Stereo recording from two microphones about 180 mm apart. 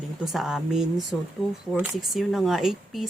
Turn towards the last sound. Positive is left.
turn(degrees=0)  # may be behind; listen again after turning